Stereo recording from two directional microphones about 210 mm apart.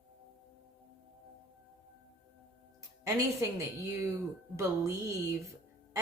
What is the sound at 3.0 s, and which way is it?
Speech, 15° right (ahead or behind).